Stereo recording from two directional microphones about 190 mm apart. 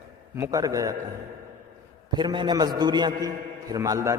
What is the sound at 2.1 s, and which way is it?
A man's voice, 25° right (ahead or behind).